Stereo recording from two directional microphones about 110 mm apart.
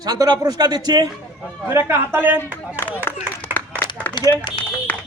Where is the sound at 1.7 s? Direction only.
20° right (ahead or behind).